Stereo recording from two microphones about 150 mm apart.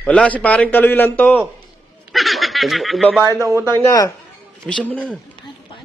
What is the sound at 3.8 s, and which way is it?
Speech, 25° left (ahead or behind).